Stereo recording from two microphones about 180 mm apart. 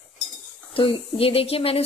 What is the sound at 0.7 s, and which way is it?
Speech, 30° left (ahead or behind).